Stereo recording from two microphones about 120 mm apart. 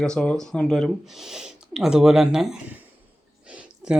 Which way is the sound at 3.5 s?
10° right (ahead or behind).